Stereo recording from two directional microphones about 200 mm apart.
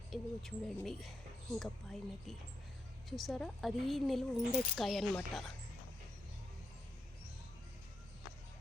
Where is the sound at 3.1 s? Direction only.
Centre (ahead or behind).